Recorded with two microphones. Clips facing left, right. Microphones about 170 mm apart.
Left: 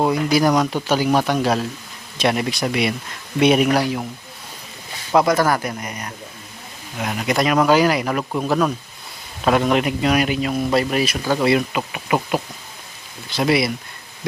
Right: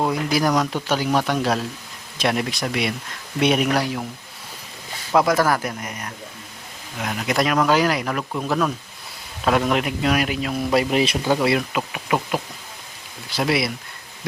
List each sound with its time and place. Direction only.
0.1 s speech: centre (ahead or behind)
5.1 s speech: centre (ahead or behind)
10.8 s speech: 20° right (ahead or behind)
11.3 s speech: centre (ahead or behind)